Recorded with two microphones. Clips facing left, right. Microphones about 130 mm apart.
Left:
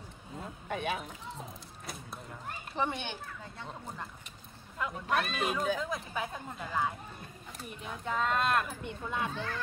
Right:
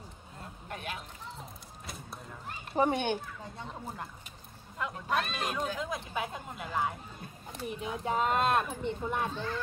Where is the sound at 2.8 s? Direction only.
45° right (ahead or behind).